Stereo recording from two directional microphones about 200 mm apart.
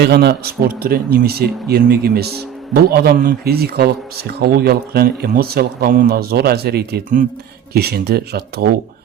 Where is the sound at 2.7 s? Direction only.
50° right (ahead or behind).